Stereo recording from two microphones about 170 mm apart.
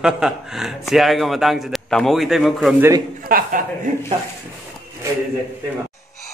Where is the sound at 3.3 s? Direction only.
55° right (ahead or behind).